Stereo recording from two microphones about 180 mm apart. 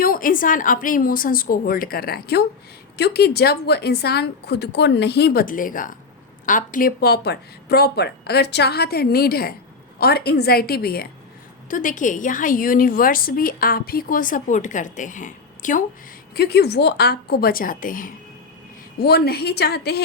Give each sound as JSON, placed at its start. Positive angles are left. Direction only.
{"t": 0.0, "sound": "a woman's voice", "side_deg": 50}
{"t": 11.7, "sound": "a woman's voice", "side_deg": 45}
{"t": 16.3, "sound": "speech", "side_deg": 60}
{"t": 18.9, "sound": "speech", "side_deg": 60}